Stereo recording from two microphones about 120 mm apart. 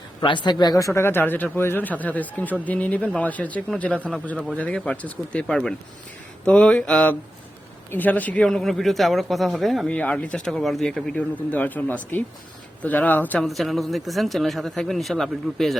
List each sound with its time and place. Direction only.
0.2 s speech: 40° left (ahead or behind); by 8.4 s 15° left (ahead or behind)
8.4 s speech: 5° left (ahead or behind)
9.9 s speech: 10° left (ahead or behind)
13.4 s speech: centre (ahead or behind)